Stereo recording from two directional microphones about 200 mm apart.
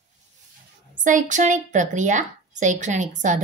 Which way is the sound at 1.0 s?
40° right (ahead or behind).